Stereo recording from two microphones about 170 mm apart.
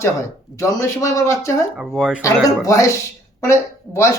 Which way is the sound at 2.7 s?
20° left (ahead or behind).